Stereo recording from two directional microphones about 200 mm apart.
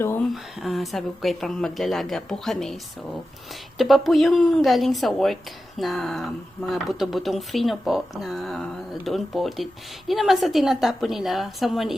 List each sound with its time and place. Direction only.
0.3 s speech: centre (ahead or behind)